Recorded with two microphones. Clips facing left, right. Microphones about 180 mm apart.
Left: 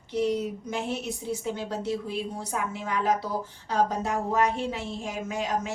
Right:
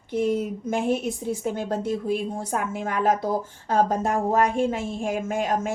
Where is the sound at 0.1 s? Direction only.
50° right (ahead or behind).